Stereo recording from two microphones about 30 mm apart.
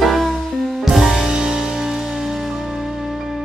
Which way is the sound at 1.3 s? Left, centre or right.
Right.